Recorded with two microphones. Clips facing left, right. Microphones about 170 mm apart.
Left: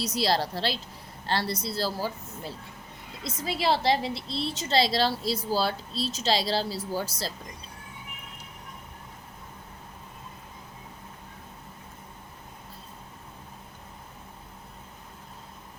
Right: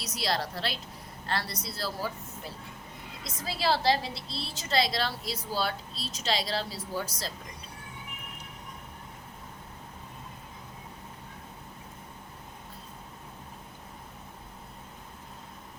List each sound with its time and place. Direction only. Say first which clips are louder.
0.0 s a woman's voice: left 5 dB; 30° left (ahead or behind)
4.1 s a woman's voice: left 7 dB; 5° right (ahead or behind)
4.7 s a woman's voice: left 4 dB; 30° left (ahead or behind)